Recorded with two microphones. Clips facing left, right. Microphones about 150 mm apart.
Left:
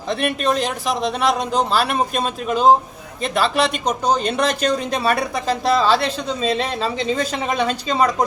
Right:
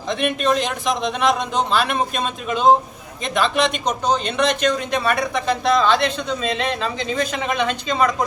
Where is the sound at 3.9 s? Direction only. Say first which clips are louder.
Left 2 dB; 35° left (ahead or behind).